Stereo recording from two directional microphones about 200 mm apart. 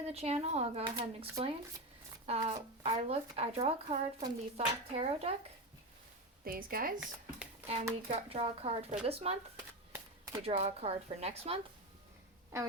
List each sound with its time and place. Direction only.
0.0 s speech: 30° right (ahead or behind)
6.4 s speech: 45° right (ahead or behind)
8.1 s speech: 30° right (ahead or behind)
9.9 s a sound: 15° right (ahead or behind)
10.4 s speech: 30° right (ahead or behind)